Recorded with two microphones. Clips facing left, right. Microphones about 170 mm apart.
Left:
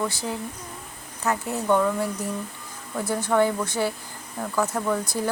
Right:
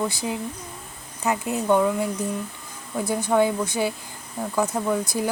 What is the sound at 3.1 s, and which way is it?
Speech, 15° right (ahead or behind).